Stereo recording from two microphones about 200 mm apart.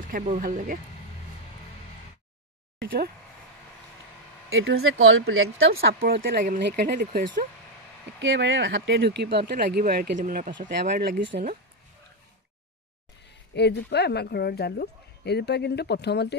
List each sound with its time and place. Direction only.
0.0 s speech: 40° right (ahead or behind)
4.5 s speech: 80° right
5.7 s speech: 50° right (ahead or behind)
8.2 s speech: 70° right (ahead or behind); by 10.5 s 40° right (ahead or behind)
10.8 s speech: 55° right (ahead or behind)
13.6 s a woman's voice: 55° left (ahead or behind)